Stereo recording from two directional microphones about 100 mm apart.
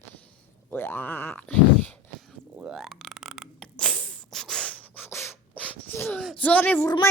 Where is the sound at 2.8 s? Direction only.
Centre (ahead or behind).